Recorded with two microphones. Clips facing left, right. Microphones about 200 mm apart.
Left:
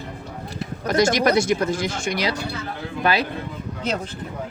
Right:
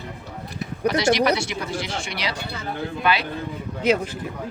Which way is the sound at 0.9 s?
45° left (ahead or behind).